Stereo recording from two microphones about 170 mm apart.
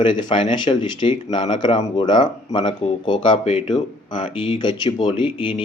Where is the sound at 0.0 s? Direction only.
30° left (ahead or behind).